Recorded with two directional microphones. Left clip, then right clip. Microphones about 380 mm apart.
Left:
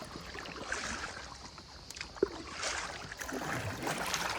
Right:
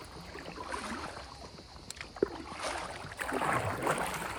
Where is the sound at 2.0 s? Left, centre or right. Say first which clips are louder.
Even; centre.